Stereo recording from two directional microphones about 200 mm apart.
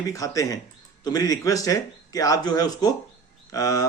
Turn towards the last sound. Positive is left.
turn(degrees=15)  # may be behind; listen again after turning